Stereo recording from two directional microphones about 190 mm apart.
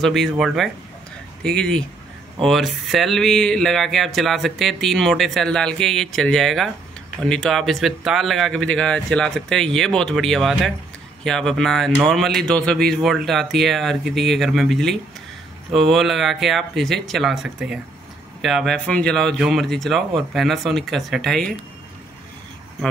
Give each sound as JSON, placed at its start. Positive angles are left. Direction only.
{"t": 0.0, "sound": "speech", "side_deg": 0}